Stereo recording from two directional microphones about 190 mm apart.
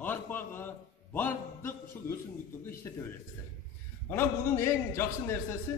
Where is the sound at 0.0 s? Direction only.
10° left (ahead or behind).